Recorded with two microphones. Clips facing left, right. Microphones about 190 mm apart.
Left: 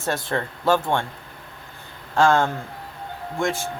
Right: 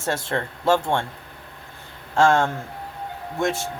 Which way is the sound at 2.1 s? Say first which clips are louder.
Even; 25° right (ahead or behind).